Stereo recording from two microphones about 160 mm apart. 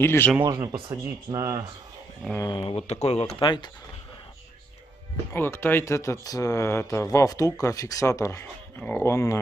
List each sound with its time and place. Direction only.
0.0 s speech: 15° left (ahead or behind)
0.4 s speech: 20° right (ahead or behind)
1.0 s speech: 20° right (ahead or behind)
2.4 s speech: 30° left (ahead or behind)
5.3 s speech: 15° left (ahead or behind)